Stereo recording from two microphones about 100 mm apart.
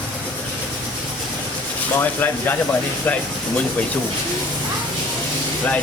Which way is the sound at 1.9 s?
20° left (ahead or behind).